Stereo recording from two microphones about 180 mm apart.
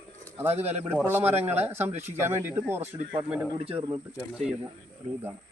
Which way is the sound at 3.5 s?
30° right (ahead or behind).